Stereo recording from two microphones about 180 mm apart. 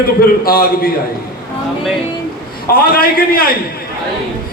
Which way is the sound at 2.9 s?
55° left (ahead or behind).